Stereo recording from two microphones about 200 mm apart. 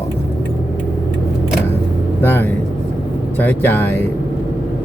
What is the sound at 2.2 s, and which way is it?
Speech, 10° left (ahead or behind).